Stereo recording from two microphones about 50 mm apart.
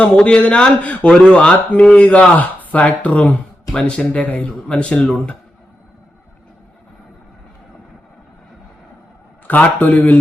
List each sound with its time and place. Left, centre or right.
0.2 s speech: left
9.5 s a man's voice: left